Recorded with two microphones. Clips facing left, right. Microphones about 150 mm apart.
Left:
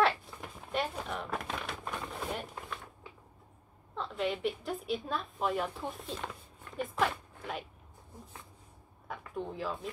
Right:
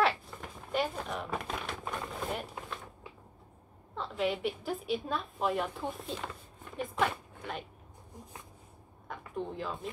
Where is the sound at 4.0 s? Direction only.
Centre (ahead or behind).